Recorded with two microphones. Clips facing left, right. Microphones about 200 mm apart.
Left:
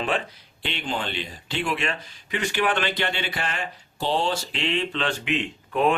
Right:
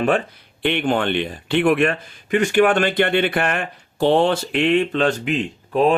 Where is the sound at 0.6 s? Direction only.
60° right (ahead or behind).